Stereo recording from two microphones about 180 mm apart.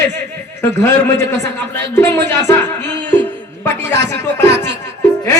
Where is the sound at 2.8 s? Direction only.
75° right (ahead or behind).